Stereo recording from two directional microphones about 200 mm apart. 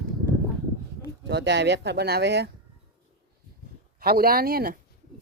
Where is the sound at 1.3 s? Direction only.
60° right (ahead or behind).